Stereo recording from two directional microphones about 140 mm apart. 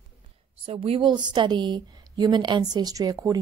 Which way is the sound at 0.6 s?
40° right (ahead or behind).